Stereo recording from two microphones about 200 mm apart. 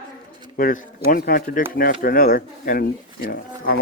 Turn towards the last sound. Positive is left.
turn(degrees=50)  # may be behind; listen again after turning